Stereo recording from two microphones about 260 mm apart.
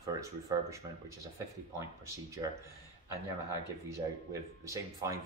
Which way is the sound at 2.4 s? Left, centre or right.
Centre.